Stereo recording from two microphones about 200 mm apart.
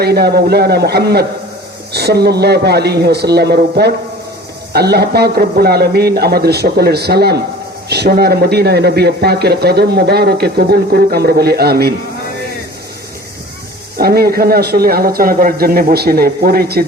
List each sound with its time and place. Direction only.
0.0 s speech: 55° right (ahead or behind)
14.0 s speech: 50° right (ahead or behind)